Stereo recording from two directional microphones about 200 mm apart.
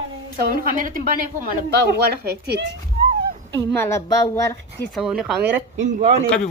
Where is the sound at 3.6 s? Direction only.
20° left (ahead or behind).